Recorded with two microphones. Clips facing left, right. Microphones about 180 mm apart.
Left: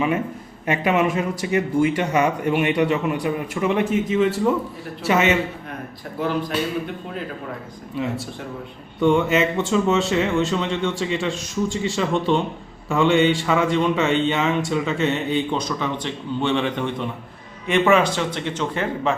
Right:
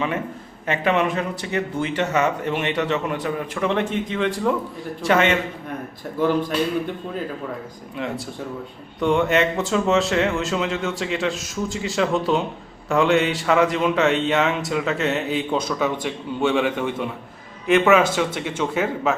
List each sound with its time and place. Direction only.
0.7 s speech: 10° left (ahead or behind)
7.9 s speech: centre (ahead or behind)